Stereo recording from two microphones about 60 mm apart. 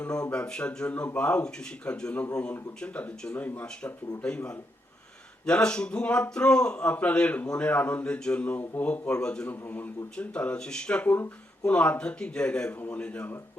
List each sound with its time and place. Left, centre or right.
0.0 s a man's voice: centre
9.5 s a man's voice: left
12.7 s a man's voice: left